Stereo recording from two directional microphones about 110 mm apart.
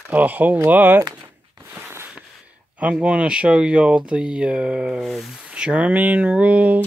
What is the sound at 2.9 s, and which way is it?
Speech, 10° right (ahead or behind).